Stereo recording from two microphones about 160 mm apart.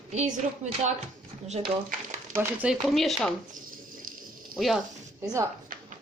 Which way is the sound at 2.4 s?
10° right (ahead or behind).